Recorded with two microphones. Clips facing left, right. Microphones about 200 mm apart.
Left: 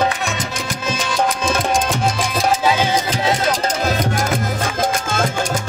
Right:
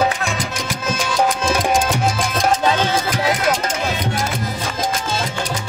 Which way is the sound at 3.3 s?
35° left (ahead or behind).